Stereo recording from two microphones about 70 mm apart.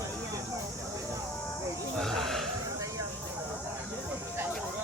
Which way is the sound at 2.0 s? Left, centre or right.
Centre.